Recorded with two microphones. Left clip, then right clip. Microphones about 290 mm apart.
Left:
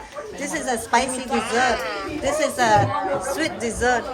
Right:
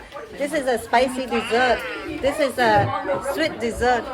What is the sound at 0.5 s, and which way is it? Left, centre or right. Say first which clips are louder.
Speech: right 1 dB; centre.